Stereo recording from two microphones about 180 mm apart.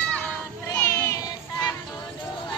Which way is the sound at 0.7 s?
15° left (ahead or behind).